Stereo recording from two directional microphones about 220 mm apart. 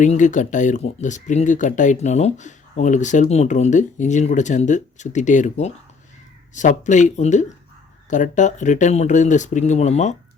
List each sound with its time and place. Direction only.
0.0 s speech: 35° left (ahead or behind)